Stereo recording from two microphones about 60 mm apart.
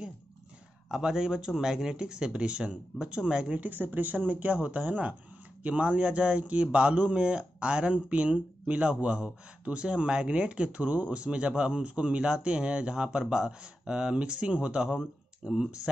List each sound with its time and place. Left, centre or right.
0.8 s speech: centre
3.7 s speech: right; by 15.7 s centre